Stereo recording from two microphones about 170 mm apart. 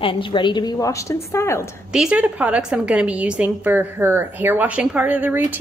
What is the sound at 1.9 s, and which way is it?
A woman's voice, 5° right (ahead or behind).